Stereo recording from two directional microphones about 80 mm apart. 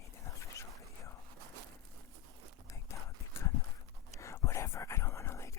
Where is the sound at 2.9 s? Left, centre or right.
Left.